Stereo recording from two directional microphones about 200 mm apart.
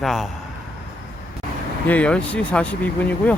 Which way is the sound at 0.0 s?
Centre (ahead or behind).